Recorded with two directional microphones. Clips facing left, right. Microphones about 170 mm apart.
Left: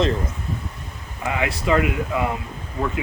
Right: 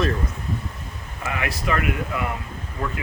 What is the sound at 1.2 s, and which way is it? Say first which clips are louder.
Speech: left 4 dB; 20° left (ahead or behind).